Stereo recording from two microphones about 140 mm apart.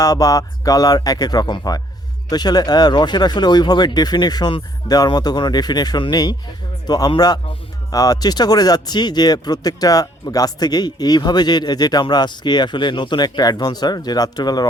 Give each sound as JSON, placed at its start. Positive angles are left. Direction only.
{"t": 0.0, "sound": "speech", "side_deg": 25}